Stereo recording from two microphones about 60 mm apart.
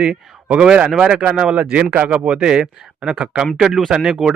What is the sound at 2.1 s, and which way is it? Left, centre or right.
Speech, centre.